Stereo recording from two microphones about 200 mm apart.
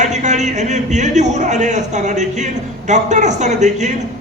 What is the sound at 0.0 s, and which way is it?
A man's voice, 35° right (ahead or behind).